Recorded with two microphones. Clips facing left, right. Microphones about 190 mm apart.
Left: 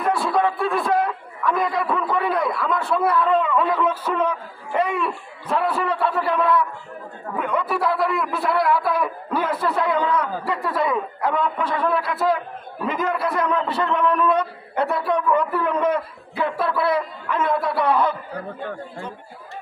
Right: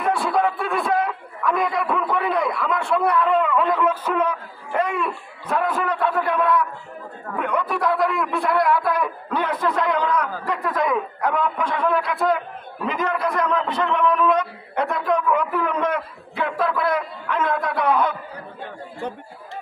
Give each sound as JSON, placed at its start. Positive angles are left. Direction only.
{"t": 0.0, "sound": "a man's voice", "side_deg": 0}
{"t": 4.1, "sound": "a man's voice", "side_deg": -5}
{"t": 5.7, "sound": "a man's voice", "side_deg": 10}
{"t": 15.2, "sound": "a man's voice", "side_deg": -10}
{"t": 15.8, "sound": "a man's voice", "side_deg": 5}